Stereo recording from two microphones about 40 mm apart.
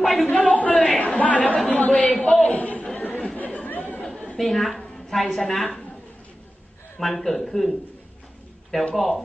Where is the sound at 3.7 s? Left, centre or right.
Left.